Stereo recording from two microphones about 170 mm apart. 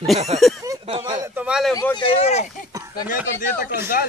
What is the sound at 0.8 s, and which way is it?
Speech, 30° right (ahead or behind).